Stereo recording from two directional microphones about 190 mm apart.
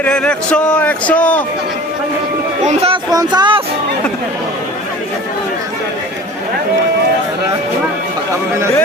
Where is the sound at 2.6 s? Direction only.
30° right (ahead or behind).